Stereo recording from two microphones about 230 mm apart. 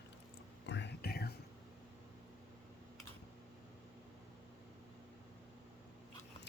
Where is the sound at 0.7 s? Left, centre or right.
Left.